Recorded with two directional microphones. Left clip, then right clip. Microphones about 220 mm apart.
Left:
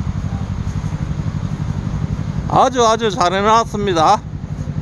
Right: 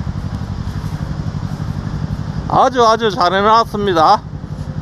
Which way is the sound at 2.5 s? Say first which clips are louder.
Right 2 dB; centre (ahead or behind).